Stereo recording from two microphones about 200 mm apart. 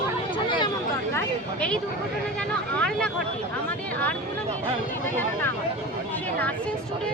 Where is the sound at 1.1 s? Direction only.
10° left (ahead or behind).